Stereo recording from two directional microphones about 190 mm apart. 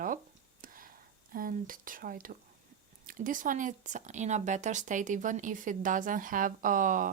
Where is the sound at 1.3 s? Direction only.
45° right (ahead or behind).